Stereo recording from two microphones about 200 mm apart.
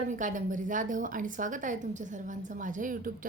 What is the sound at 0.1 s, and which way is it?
A woman's voice, 40° right (ahead or behind).